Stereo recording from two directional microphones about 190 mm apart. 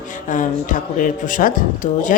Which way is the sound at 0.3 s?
40° left (ahead or behind).